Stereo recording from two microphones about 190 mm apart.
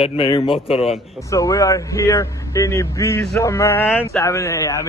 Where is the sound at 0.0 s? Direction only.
30° left (ahead or behind).